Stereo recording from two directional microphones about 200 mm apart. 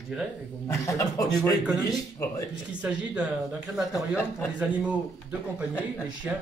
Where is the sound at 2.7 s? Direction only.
5° right (ahead or behind).